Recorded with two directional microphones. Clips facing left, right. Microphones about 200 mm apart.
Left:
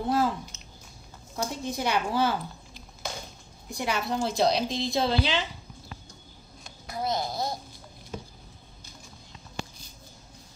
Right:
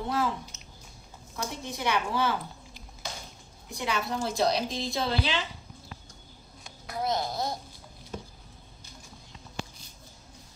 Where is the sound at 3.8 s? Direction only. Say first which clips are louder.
Left 2 dB; 30° left (ahead or behind).